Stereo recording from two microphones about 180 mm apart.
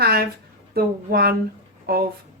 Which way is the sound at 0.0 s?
60° right (ahead or behind).